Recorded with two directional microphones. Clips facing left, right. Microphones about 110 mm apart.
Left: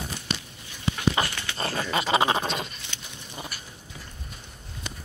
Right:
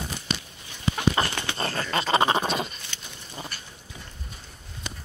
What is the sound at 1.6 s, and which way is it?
Dog, 10° left (ahead or behind).